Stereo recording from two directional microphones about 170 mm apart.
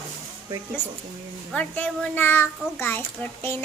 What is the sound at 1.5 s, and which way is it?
A child's voice, 10° left (ahead or behind).